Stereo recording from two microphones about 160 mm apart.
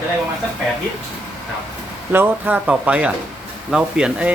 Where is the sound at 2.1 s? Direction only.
10° right (ahead or behind).